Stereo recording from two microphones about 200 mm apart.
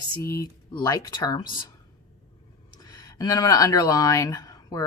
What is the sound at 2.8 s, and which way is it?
Speech, 20° left (ahead or behind).